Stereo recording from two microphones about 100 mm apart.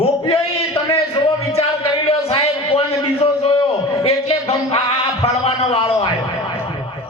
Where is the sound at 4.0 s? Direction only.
85° left.